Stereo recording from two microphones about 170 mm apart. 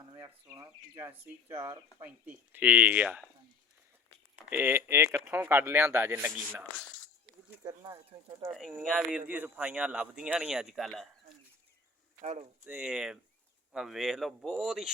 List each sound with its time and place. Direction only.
0.2 s speech: 15° right (ahead or behind)
4.4 s speech: 10° right (ahead or behind)
7.6 s speech: 20° right (ahead or behind)
8.4 s speech: centre (ahead or behind)
12.2 s speech: 45° right (ahead or behind)
12.6 s speech: 10° right (ahead or behind)